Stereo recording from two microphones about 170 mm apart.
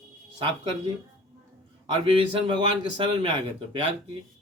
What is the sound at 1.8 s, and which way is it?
Speech, 30° right (ahead or behind).